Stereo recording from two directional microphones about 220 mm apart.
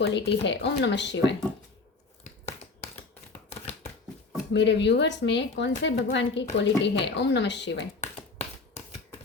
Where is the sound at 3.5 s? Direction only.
30° left (ahead or behind).